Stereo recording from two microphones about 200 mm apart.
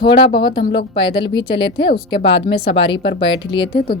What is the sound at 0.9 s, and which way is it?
Speech, 25° left (ahead or behind).